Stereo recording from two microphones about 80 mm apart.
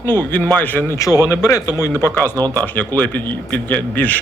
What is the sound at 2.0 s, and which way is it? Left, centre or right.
Speech, left.